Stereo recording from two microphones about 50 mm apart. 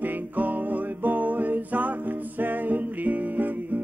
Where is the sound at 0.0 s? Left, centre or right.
Right.